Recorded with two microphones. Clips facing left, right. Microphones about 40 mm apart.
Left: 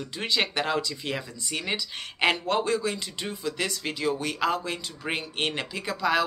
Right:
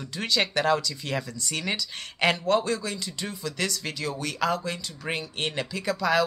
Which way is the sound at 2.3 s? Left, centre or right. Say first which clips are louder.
Right 1 dB; left.